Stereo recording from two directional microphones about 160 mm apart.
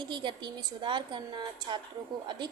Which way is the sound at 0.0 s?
30° right (ahead or behind).